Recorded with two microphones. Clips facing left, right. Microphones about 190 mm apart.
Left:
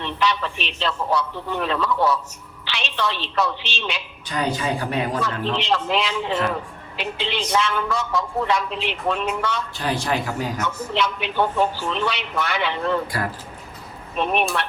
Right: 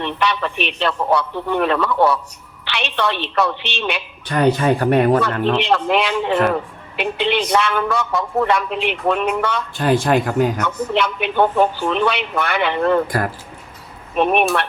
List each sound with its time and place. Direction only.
0.0 s speech: 60° right (ahead or behind)